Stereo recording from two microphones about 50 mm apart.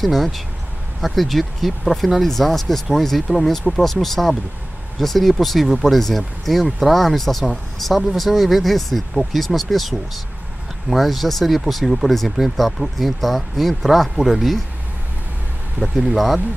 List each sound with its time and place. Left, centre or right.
0.0 s speech: centre
15.8 s speech: right